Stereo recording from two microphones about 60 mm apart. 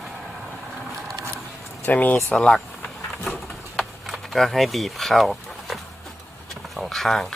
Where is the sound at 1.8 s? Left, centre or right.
Left.